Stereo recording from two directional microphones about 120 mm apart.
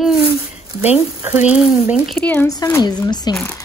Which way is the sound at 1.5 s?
10° right (ahead or behind).